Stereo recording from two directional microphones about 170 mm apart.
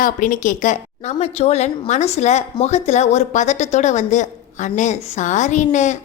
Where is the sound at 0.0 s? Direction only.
50° left (ahead or behind).